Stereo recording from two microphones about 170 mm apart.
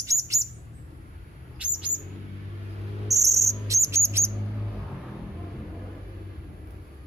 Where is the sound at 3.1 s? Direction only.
20° right (ahead or behind).